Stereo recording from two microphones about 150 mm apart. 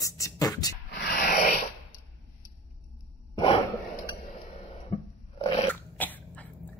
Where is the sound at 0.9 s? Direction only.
90° left; by 1.6 s 75° left (ahead or behind).